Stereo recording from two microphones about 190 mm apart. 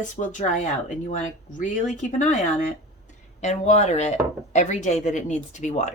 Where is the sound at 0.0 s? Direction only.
40° left (ahead or behind).